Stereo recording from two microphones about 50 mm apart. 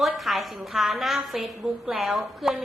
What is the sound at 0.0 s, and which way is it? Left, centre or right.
A woman's voice, centre.